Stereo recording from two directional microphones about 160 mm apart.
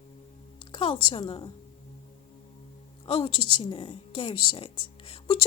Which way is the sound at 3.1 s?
35° left (ahead or behind).